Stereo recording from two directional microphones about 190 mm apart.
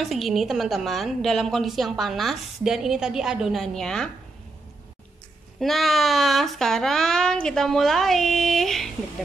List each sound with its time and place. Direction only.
0.0 s a woman's voice: centre (ahead or behind)
5.6 s a woman's voice: centre (ahead or behind)